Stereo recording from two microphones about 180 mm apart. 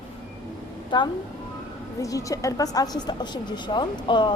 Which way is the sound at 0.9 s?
25° left (ahead or behind).